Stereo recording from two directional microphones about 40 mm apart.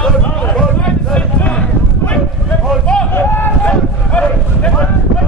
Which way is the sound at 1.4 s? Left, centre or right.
Left.